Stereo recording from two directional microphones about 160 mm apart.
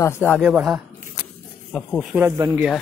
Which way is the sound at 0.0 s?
10° left (ahead or behind).